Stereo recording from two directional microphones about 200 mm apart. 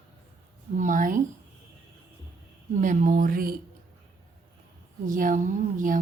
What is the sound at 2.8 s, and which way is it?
Speech, 40° right (ahead or behind).